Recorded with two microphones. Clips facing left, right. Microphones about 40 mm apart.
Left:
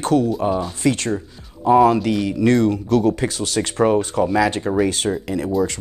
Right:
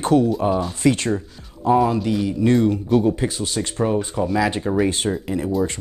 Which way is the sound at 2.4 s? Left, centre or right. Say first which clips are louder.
Left 1 dB; left.